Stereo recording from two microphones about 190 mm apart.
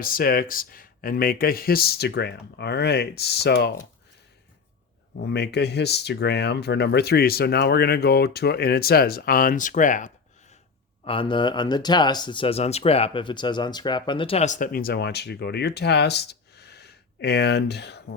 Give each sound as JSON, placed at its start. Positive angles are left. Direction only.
{"t": 0.0, "sound": "speech", "side_deg": 50}
{"t": 5.2, "sound": "speech", "side_deg": 60}
{"t": 11.0, "sound": "speech", "side_deg": 25}